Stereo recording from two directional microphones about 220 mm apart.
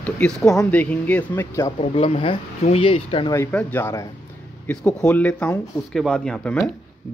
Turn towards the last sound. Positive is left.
turn(degrees=5)  # may be behind; listen again after turning